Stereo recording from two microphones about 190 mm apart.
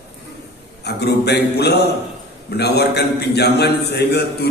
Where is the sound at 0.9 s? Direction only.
60° left (ahead or behind).